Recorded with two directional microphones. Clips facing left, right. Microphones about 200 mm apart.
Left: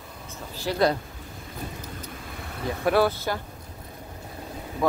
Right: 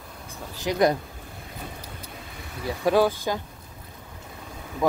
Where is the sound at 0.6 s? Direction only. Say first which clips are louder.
Right 1 dB; 15° right (ahead or behind).